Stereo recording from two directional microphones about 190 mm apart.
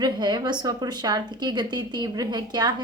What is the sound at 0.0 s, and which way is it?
A woman's voice, 20° right (ahead or behind).